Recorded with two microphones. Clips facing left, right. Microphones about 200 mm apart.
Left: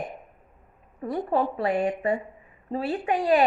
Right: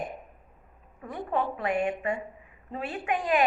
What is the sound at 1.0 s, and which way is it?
A woman's voice, 35° left (ahead or behind).